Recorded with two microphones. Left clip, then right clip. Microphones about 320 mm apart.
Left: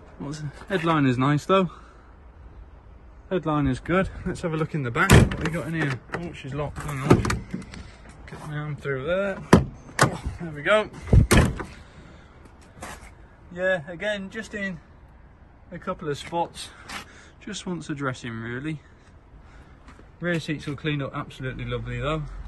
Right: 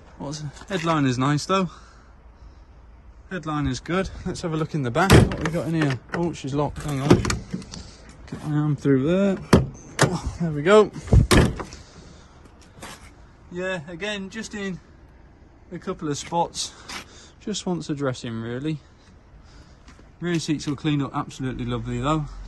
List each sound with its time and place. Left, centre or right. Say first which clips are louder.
0.2 s speech: right 2 dB; centre
3.3 s speech: left 3 dB; centre
6.3 s speech: right 6 dB; centre
6.9 s power windows: even; centre
8.7 s speech: right 7 dB; centre
9.3 s a sound: even; centre
10.1 s speech: right 6 dB; right
11.4 s door: right 2 dB; centre
12.8 s speech: left 1 dB; centre
19.9 s speech: even; centre